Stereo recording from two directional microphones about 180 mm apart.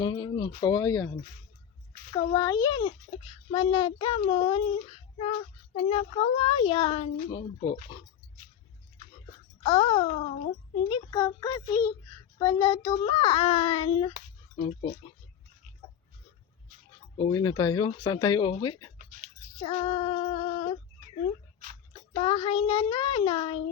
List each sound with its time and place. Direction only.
0.0 s a child's voice: 25° left (ahead or behind)
9.6 s a child's voice: 30° left (ahead or behind)
17.2 s a child's voice: 25° left (ahead or behind)
19.5 s female singing: 35° left (ahead or behind)
22.1 s a child's voice: 35° left (ahead or behind)